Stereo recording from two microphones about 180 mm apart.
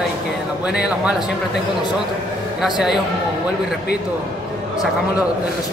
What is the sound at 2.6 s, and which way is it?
Speech, 5° right (ahead or behind).